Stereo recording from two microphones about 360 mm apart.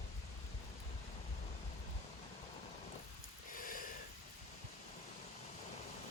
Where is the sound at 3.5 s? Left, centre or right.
Left.